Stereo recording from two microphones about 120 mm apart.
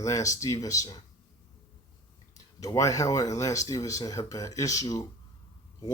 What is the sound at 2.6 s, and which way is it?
Speech, 30° left (ahead or behind).